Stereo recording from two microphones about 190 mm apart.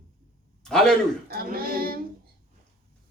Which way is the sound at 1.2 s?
50° right (ahead or behind).